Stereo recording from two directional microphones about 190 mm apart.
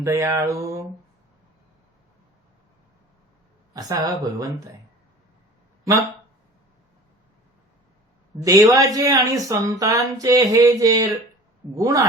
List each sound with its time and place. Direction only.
0.0 s a woman's voice: 15° right (ahead or behind)
3.8 s speech: 20° right (ahead or behind)
8.4 s a woman's voice: 15° right (ahead or behind)